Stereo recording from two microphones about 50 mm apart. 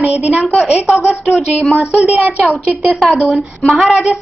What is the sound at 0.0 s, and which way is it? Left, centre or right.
Speech, right.